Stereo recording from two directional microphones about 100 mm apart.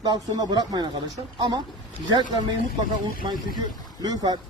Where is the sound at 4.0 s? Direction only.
40° right (ahead or behind).